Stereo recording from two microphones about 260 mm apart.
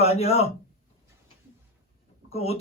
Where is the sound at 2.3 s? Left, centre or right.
Left.